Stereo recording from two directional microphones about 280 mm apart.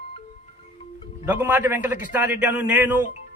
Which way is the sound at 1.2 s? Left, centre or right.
Centre.